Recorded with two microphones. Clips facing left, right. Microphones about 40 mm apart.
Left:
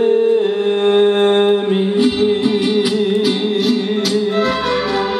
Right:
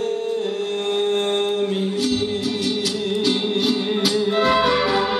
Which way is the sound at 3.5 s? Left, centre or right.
Centre.